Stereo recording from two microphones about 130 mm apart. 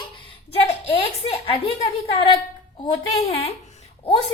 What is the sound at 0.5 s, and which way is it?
A woman's voice, 50° left (ahead or behind).